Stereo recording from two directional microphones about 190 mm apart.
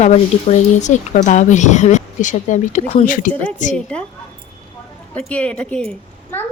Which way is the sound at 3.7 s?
5° left (ahead or behind).